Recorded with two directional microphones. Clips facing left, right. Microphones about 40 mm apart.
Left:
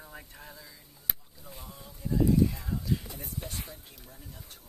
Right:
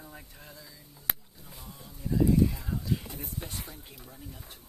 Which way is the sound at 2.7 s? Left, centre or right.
Right.